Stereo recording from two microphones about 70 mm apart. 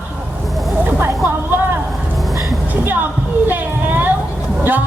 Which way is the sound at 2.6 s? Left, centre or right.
Right.